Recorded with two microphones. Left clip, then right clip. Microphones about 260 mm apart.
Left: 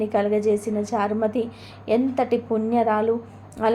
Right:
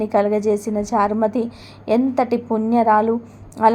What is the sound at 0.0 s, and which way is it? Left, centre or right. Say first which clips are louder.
A woman's voice: right 3 dB; centre.